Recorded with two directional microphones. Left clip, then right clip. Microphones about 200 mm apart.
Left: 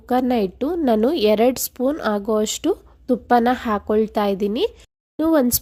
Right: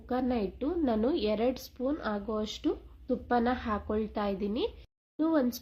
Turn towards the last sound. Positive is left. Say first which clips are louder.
# left 11 dB
turn(degrees=55)  # may be behind; listen again after turning